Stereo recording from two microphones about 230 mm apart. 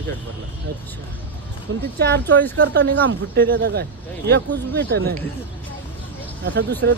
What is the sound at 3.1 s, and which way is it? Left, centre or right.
Speech, right.